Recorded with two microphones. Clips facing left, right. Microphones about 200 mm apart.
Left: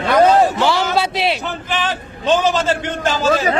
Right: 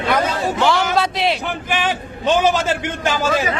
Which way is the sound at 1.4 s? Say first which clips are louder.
Right 1 dB; 10° right (ahead or behind).